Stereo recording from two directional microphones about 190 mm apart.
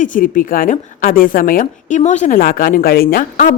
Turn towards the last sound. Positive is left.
turn(degrees=45)  # may be behind; listen again after turning